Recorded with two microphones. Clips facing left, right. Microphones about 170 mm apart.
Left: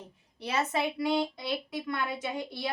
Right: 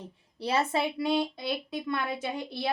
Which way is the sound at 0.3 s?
30° right (ahead or behind).